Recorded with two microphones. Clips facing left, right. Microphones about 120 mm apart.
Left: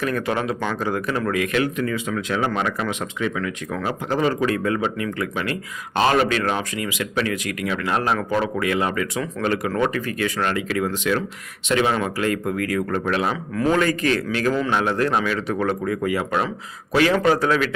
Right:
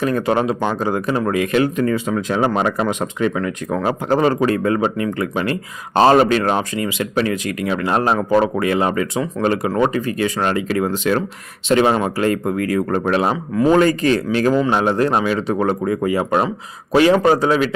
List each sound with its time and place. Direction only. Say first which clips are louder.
0.0 s speech: right 6 dB; 30° right (ahead or behind)